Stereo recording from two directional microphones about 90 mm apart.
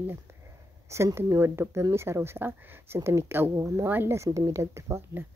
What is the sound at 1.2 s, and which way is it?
Speech, 30° right (ahead or behind).